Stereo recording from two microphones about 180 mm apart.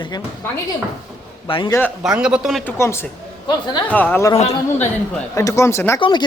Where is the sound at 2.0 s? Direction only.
5° right (ahead or behind).